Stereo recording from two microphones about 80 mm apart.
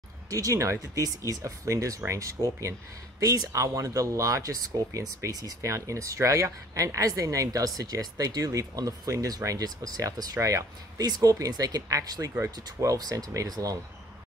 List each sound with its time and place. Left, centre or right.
0.3 s speech: right
13.3 s speech: right